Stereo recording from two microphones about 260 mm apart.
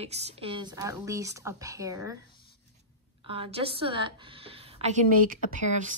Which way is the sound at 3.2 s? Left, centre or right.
Right.